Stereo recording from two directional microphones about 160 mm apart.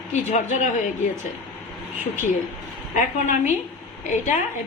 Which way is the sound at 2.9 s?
50° left (ahead or behind).